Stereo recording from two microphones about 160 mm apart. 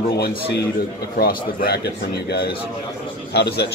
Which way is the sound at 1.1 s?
65° left (ahead or behind).